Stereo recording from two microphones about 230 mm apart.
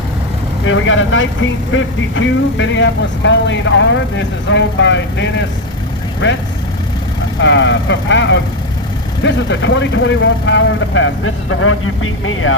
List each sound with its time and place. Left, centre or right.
0.6 s speech: left
7.4 s speech: left